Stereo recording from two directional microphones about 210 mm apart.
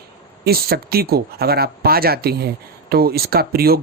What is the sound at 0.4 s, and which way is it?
Speech, 45° right (ahead or behind).